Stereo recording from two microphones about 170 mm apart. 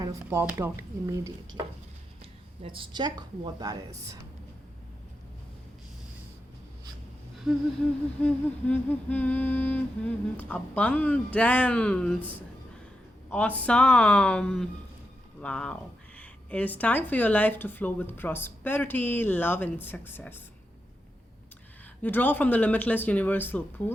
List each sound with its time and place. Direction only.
0.0 s speech: 15° right (ahead or behind)
2.6 s a woman's voice: 30° right (ahead or behind)
7.5 s humming: centre (ahead or behind)
8.2 s speech: 10° left (ahead or behind)
22.0 s speech: 10° left (ahead or behind)